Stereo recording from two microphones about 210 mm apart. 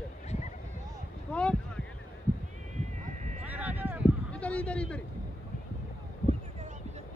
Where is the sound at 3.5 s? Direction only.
10° right (ahead or behind).